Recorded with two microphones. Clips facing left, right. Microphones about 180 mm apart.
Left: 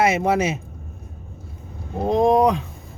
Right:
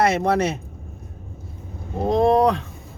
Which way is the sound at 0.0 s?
5° left (ahead or behind).